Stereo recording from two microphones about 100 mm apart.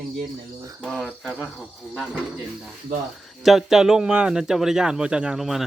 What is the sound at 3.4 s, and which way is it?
Speech, 5° right (ahead or behind).